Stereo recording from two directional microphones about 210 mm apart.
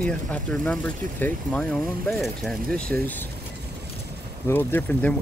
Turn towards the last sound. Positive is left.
turn(degrees=10)  # may be behind; listen again after turning